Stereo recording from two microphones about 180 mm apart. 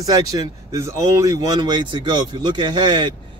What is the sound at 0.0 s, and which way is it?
Speech, 20° right (ahead or behind).